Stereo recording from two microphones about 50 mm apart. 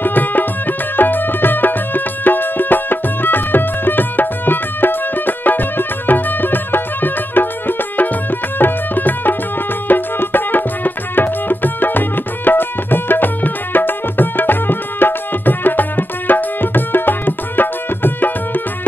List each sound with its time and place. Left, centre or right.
0.0 s music: left